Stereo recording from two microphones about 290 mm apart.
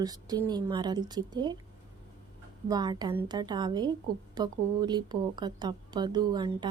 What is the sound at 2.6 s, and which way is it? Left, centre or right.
Speech, centre.